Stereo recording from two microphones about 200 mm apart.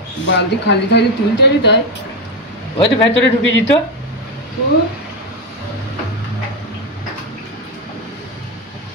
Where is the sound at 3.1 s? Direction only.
65° left (ahead or behind).